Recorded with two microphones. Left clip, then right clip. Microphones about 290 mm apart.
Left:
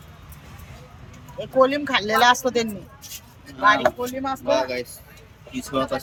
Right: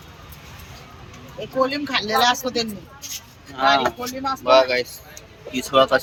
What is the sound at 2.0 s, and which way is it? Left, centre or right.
Speech, left.